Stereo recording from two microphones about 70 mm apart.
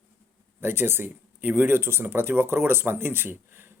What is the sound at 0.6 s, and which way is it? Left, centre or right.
A man's voice, right.